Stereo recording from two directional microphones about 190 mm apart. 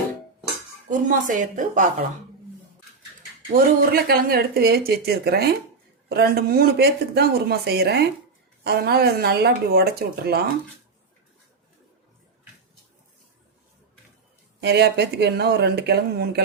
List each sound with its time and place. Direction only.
0.9 s a woman's voice: 45° right (ahead or behind)
3.5 s a woman's voice: 55° right (ahead or behind)
14.6 s speech: 60° right (ahead or behind)